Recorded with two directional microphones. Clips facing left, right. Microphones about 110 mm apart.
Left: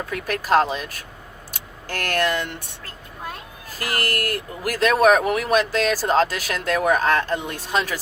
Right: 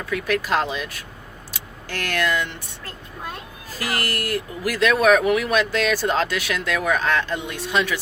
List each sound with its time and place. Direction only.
0.0 s speech: 45° left (ahead or behind)
3.7 s speech: 50° left (ahead or behind)